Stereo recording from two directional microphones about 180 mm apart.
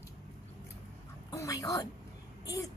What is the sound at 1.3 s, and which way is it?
A child's voice, 20° left (ahead or behind).